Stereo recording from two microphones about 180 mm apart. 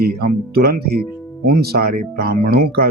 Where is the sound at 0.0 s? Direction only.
60° right (ahead or behind).